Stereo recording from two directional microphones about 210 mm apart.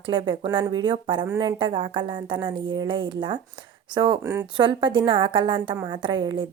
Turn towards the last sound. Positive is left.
turn(degrees=-20)  # may be behind; listen again after turning